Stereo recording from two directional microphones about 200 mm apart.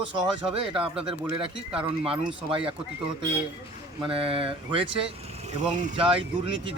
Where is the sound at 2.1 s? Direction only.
25° right (ahead or behind).